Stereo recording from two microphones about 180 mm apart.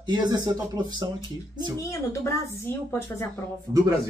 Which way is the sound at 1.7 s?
15° left (ahead or behind).